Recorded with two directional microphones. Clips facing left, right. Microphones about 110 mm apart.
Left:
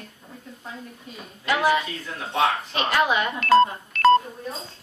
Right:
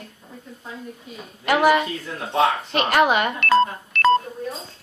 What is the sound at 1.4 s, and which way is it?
Speech, 60° right (ahead or behind).